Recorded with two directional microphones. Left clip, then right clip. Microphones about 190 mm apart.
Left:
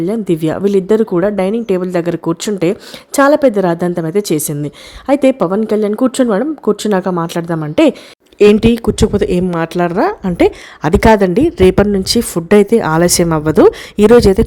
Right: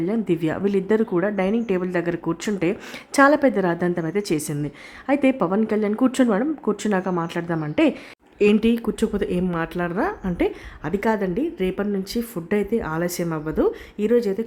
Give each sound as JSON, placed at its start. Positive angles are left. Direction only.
{"t": 0.0, "sound": "a woman's voice", "side_deg": 25}